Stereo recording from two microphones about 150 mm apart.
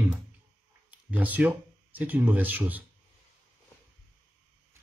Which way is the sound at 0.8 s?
10° right (ahead or behind).